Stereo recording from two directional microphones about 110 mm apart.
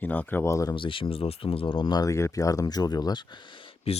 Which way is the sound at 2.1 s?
30° left (ahead or behind).